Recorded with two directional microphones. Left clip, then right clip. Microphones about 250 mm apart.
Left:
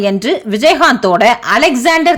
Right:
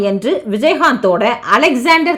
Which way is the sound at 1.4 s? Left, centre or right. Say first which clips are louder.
Left 1 dB; left.